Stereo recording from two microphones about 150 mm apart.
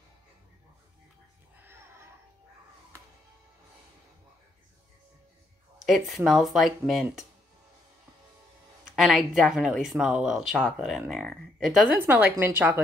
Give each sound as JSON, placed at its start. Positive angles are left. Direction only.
{"t": 1.6, "sound": "a sound", "side_deg": -15}
{"t": 5.8, "sound": "speech", "side_deg": 0}
{"t": 8.9, "sound": "speech", "side_deg": 0}
{"t": 12.0, "sound": "a woman's voice", "side_deg": -15}